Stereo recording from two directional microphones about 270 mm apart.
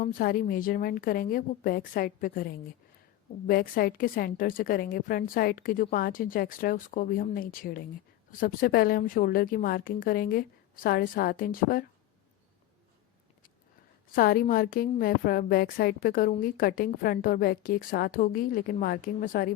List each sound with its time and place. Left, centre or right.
0.0 s a woman's voice: left
14.2 s a woman's voice: left